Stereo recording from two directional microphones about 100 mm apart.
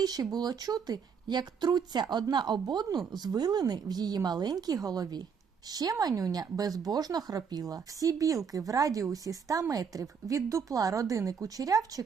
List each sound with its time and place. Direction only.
0.0 s speech: 40° right (ahead or behind)